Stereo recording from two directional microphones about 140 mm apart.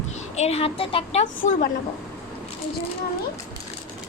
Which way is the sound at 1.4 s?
80° left.